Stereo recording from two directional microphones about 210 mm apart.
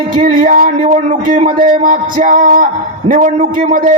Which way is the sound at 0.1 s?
40° right (ahead or behind).